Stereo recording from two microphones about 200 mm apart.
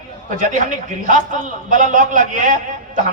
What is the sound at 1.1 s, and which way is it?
A man's voice, 40° right (ahead or behind).